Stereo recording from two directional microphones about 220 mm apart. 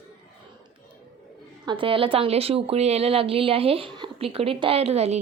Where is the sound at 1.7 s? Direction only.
25° right (ahead or behind).